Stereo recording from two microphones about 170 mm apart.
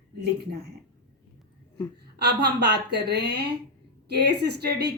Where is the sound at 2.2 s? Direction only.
80° right.